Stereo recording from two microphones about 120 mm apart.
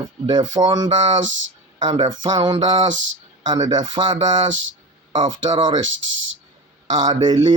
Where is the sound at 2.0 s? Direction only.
40° right (ahead or behind).